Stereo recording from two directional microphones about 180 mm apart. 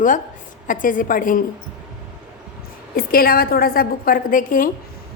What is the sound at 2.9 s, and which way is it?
A woman's voice, 55° left (ahead or behind).